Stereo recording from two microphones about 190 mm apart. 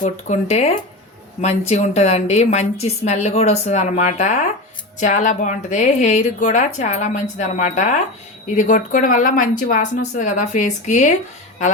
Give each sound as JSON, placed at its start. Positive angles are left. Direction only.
{"t": 0.0, "sound": "a woman's voice", "side_deg": 35}